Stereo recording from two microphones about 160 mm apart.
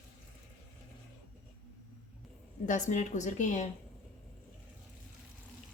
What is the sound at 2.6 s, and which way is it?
Speech, 50° left (ahead or behind).